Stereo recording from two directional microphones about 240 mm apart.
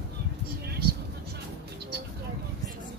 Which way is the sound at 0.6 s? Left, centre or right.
Right.